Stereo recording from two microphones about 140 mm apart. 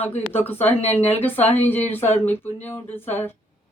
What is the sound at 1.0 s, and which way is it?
Speech, 45° left (ahead or behind).